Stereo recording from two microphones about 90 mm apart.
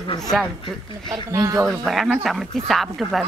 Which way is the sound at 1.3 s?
35° right (ahead or behind).